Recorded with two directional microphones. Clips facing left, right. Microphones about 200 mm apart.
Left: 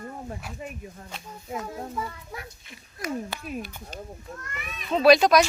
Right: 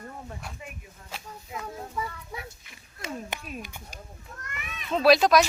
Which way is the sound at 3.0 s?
20° right (ahead or behind).